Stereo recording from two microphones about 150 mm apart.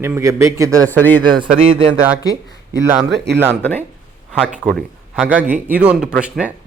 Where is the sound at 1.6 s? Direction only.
40° right (ahead or behind).